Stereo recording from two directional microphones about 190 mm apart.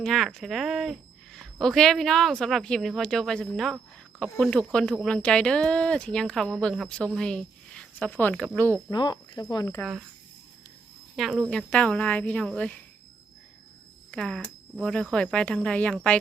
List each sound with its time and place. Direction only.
0.0 s speech: centre (ahead or behind)
8.9 s speech: 20° left (ahead or behind)
11.2 s speech: centre (ahead or behind)
14.1 s speech: 5° left (ahead or behind)